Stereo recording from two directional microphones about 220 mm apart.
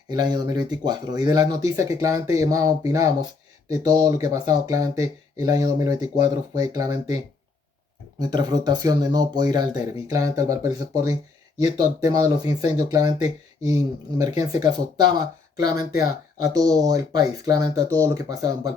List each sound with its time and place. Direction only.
0.1 s speech: 20° right (ahead or behind)
8.2 s speech: 20° right (ahead or behind)